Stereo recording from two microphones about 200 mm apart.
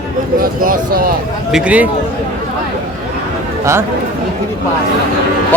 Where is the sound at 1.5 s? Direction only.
5° right (ahead or behind).